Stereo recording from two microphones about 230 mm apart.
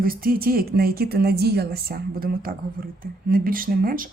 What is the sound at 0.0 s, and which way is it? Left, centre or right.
Speech, right.